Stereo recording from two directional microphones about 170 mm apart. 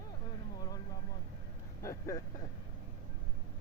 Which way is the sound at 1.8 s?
20° left (ahead or behind).